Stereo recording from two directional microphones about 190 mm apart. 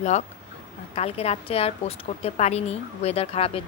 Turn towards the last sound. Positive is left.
turn(degrees=30)  # may be behind; listen again after turning